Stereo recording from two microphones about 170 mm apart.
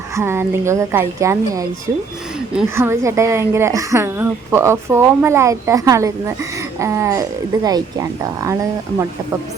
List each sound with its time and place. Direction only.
0.2 s speech: 15° right (ahead or behind)
2.6 s speech: 15° right (ahead or behind)